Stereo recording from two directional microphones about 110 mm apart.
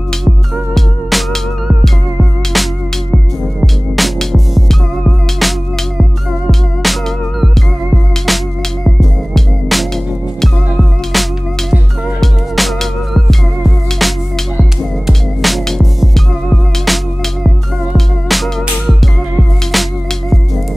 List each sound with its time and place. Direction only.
0.7 s music: 5° left (ahead or behind)
3.6 s music: centre (ahead or behind)